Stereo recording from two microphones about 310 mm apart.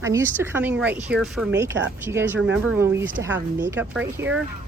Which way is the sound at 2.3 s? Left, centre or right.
Right.